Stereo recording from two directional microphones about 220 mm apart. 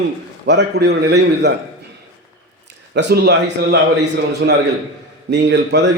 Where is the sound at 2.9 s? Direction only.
50° right (ahead or behind).